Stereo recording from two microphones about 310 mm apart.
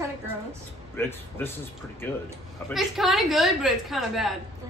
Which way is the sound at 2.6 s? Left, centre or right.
Centre.